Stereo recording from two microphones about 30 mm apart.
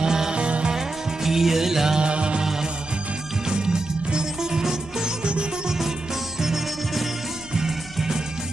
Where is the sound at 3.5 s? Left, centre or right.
Right.